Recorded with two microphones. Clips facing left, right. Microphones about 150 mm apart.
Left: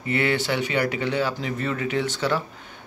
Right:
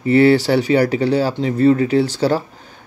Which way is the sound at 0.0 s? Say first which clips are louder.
Right 12 dB; 35° right (ahead or behind).